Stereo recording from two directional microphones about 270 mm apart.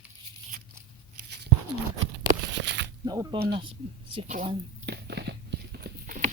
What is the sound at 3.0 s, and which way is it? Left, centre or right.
Speech, centre.